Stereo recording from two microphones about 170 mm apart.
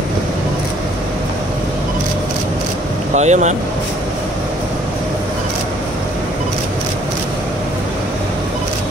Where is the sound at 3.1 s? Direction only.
45° right (ahead or behind).